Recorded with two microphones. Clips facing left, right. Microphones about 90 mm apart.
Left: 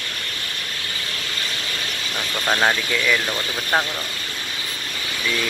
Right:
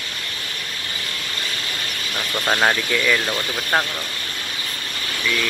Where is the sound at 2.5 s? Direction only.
5° right (ahead or behind).